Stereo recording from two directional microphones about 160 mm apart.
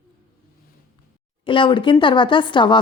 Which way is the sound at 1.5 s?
30° left (ahead or behind).